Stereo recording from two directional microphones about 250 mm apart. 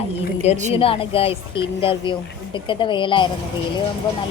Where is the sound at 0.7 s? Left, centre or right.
Left.